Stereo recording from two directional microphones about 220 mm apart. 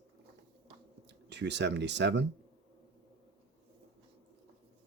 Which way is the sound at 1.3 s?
50° right (ahead or behind).